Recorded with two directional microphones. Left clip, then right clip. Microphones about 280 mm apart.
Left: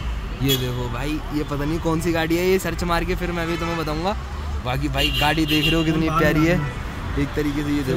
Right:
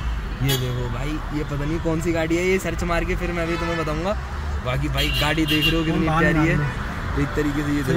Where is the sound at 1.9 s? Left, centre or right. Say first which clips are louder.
Left 1 dB; left.